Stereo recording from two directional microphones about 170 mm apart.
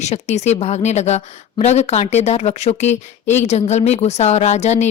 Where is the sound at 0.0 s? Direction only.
40° left (ahead or behind).